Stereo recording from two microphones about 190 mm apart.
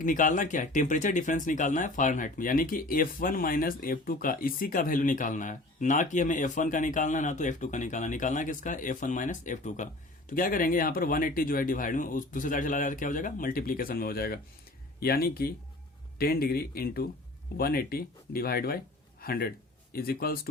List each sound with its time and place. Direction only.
0.0 s speech: 45° left (ahead or behind)